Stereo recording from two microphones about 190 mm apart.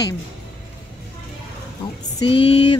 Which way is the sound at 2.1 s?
30° left (ahead or behind).